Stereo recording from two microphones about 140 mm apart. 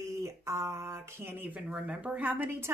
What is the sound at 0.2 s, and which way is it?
Speech, 20° right (ahead or behind).